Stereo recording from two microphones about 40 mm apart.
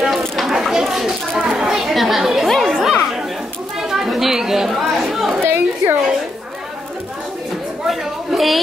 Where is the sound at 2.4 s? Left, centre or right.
Centre.